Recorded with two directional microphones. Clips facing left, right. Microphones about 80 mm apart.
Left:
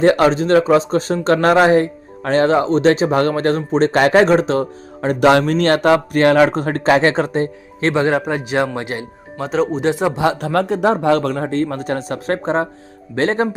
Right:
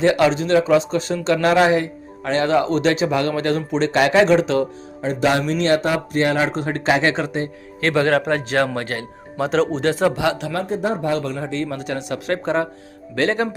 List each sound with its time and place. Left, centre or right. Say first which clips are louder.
0.0 s speech: left 3 dB; left
4.9 s speech: left 6 dB; left
6.6 s speech: left 4 dB; left
8.1 s speech: even; centre
9.4 s speech: even; centre
9.8 s speech: left 1 dB; centre
10.5 s speech: left 6 dB; left